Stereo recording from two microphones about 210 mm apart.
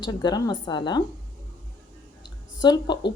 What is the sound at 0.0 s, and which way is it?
A woman's voice, 20° left (ahead or behind).